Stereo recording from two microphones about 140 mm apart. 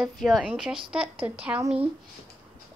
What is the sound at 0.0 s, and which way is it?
A woman's voice, centre (ahead or behind).